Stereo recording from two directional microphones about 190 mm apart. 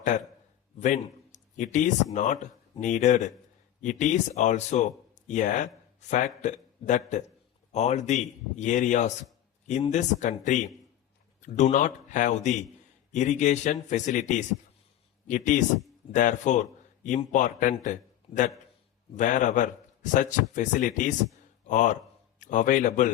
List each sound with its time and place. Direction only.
0.8 s a man's voice: 40° left (ahead or behind)